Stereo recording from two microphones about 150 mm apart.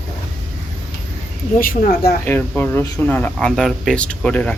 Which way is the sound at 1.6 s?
75° left (ahead or behind).